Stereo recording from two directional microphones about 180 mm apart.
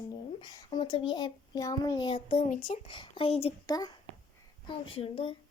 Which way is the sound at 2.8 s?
25° left (ahead or behind).